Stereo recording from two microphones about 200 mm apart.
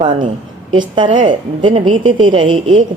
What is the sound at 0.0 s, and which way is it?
A woman's voice, 25° right (ahead or behind).